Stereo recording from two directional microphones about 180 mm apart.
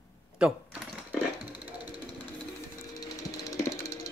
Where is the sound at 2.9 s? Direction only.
15° left (ahead or behind).